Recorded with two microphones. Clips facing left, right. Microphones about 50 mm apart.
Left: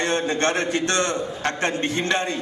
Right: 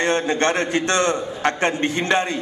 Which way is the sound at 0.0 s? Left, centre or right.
Right.